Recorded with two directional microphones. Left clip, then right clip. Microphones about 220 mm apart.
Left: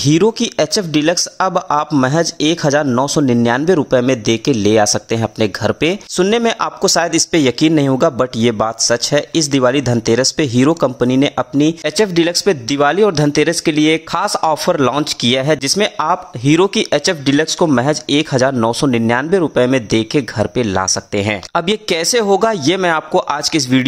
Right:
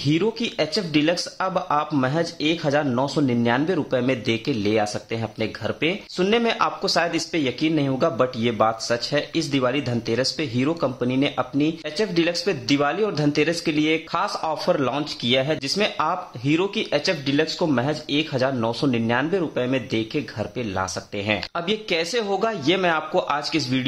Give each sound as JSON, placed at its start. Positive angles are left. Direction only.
{"t": 0.0, "sound": "speech", "side_deg": 45}